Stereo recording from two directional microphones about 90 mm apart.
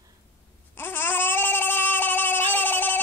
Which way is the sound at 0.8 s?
25° left (ahead or behind).